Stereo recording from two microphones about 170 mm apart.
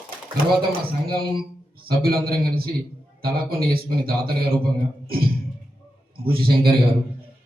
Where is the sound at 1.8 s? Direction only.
60° right (ahead or behind).